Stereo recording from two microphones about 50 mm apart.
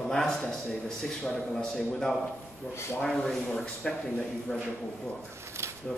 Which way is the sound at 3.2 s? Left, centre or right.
Centre.